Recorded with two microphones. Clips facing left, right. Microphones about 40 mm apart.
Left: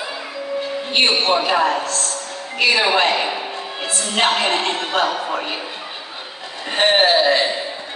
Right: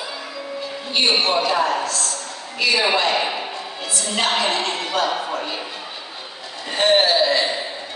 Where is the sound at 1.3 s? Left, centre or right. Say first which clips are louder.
Left 2 dB; left.